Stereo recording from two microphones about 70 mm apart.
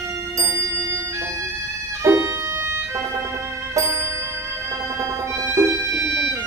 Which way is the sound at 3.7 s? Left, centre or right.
Right.